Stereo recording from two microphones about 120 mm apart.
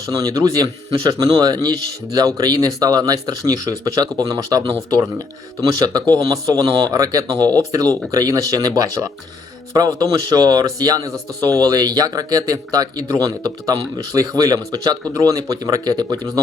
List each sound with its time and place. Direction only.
0.1 s speech: 30° right (ahead or behind)
5.8 s speech: 35° right (ahead or behind)